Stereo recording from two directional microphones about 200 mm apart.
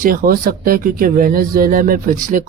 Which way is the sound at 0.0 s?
45° right (ahead or behind).